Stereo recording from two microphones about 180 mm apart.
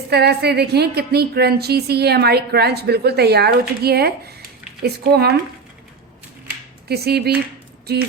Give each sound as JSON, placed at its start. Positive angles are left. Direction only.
{"t": 0.1, "sound": "a woman's voice", "side_deg": -65}
{"t": 6.8, "sound": "a woman's voice", "side_deg": -65}